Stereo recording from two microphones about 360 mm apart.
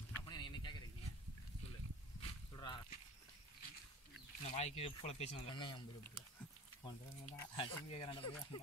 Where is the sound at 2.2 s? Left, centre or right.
Centre.